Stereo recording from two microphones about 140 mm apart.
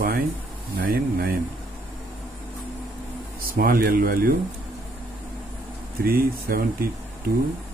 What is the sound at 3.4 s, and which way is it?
Speech, 90° right.